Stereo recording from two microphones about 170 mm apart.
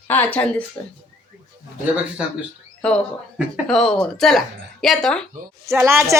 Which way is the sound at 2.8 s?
5° left (ahead or behind).